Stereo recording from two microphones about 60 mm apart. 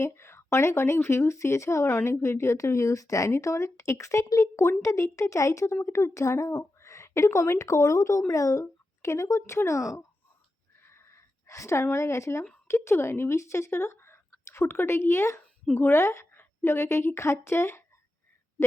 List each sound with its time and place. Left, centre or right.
0.0 s speech: left
6.8 s speech: left
10.8 s a sound: left
12.6 s a woman's voice: left